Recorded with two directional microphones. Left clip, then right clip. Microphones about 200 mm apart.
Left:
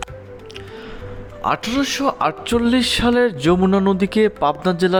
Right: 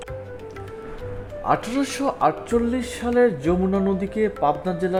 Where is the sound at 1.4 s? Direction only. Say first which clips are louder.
Left 3 dB; 10° left (ahead or behind).